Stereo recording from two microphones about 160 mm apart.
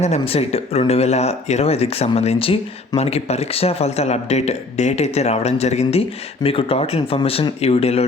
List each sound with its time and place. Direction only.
0.0 s speech: 40° left (ahead or behind)